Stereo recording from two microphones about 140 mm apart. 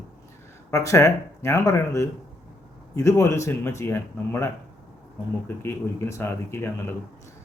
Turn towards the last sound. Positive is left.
turn(degrees=20)  # may be behind; listen again after turning